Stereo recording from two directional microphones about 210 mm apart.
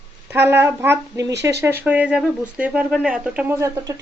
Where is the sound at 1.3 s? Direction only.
55° right (ahead or behind).